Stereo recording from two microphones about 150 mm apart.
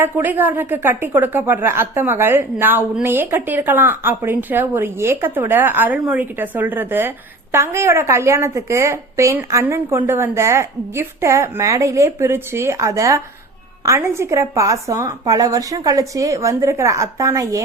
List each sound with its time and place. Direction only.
0.0 s a woman's voice: 15° right (ahead or behind)